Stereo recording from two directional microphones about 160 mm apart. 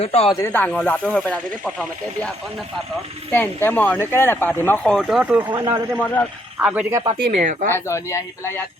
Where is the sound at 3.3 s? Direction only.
15° left (ahead or behind); by 5.4 s 5° right (ahead or behind).